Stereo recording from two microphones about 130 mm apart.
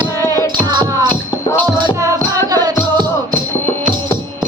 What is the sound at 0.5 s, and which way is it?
Music, 35° right (ahead or behind).